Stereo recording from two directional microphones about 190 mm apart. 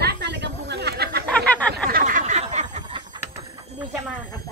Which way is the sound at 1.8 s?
45° right (ahead or behind).